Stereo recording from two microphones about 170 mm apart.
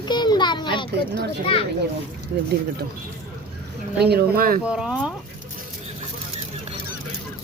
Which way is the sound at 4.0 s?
70° right (ahead or behind).